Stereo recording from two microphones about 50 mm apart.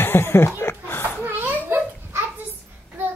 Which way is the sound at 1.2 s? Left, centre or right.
Right.